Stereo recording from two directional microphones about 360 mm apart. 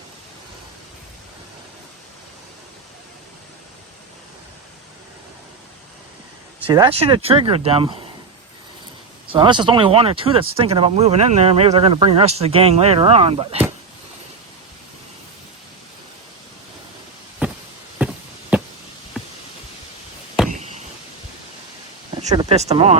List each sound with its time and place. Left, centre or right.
6.7 s speech: centre
9.3 s speech: centre
18.0 s a sound: centre
22.2 s speech: centre